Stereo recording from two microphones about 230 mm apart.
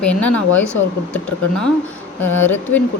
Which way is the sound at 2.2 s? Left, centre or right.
Centre.